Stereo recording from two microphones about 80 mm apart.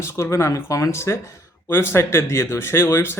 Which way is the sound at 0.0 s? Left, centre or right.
Left.